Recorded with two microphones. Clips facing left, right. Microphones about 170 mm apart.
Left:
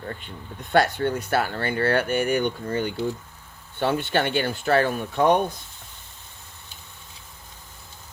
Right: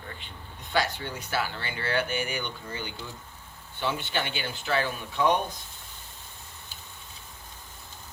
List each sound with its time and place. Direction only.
0.7 s speech: 55° left (ahead or behind)